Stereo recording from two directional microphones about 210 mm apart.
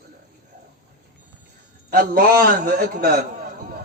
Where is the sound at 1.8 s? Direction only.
45° right (ahead or behind).